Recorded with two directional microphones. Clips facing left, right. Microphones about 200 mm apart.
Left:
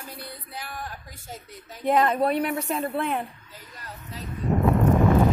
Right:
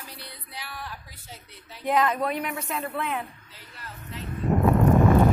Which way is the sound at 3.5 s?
45° left (ahead or behind).